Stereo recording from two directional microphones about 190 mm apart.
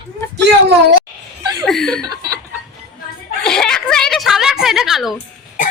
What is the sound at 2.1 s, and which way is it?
Chuckle, 15° right (ahead or behind).